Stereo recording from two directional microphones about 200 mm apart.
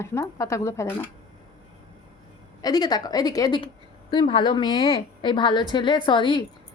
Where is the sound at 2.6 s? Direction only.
20° left (ahead or behind).